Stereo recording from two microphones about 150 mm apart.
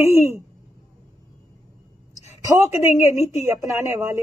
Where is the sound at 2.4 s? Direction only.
20° right (ahead or behind).